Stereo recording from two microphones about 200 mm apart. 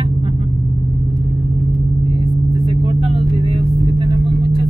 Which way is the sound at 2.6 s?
25° right (ahead or behind).